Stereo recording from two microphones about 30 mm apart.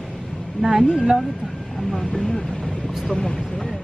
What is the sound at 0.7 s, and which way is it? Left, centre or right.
Speech, centre.